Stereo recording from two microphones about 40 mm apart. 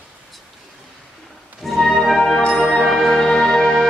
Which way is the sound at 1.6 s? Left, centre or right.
Centre.